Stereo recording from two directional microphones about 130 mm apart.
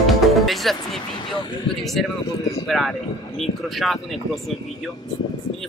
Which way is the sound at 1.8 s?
Centre (ahead or behind).